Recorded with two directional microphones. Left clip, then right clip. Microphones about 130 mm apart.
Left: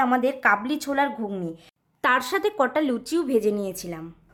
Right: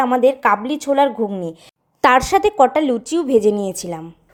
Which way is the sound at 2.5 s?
20° right (ahead or behind).